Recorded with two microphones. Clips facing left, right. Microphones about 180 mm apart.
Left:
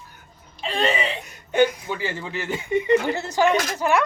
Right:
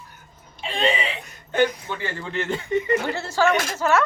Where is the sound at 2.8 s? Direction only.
20° left (ahead or behind).